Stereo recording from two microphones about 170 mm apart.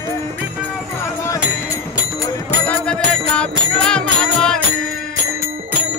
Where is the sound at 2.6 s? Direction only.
5° left (ahead or behind).